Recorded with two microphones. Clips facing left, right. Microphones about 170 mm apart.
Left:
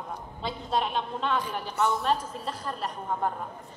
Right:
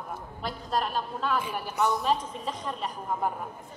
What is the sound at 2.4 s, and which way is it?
A woman's voice, centre (ahead or behind).